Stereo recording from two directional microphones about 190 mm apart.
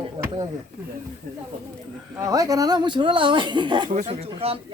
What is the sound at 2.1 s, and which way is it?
Speech, 15° right (ahead or behind).